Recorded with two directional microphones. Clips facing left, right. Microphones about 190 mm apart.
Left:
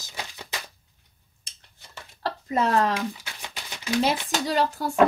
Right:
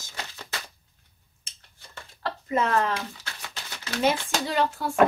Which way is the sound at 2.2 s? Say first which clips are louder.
Left 1 dB; 35° left (ahead or behind).